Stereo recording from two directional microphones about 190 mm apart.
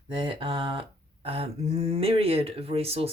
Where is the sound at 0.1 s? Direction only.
25° right (ahead or behind).